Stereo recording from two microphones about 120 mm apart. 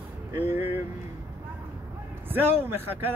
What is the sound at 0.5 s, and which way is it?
Speech, 15° right (ahead or behind).